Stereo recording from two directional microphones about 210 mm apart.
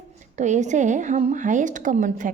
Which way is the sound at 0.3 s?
35° right (ahead or behind).